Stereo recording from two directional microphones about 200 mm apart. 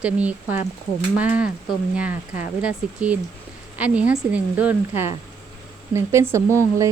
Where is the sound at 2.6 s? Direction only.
5° right (ahead or behind).